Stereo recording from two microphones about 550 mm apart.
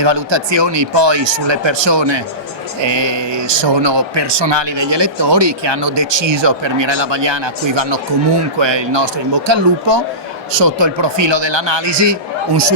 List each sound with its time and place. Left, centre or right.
0.0 s speech: right